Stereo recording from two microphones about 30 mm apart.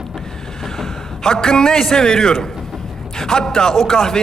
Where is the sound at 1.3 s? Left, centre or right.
Left.